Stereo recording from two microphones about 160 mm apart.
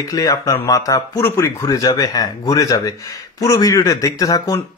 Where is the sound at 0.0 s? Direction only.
20° left (ahead or behind).